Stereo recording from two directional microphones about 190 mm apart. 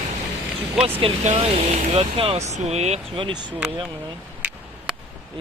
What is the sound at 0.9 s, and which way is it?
Speech, 35° right (ahead or behind).